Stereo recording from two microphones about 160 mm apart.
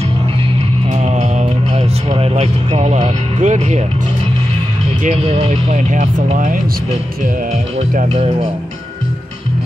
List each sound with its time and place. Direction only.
1.0 s music: 45° right (ahead or behind)
5.0 s speech: 45° right (ahead or behind)
7.9 s speech: 45° right (ahead or behind)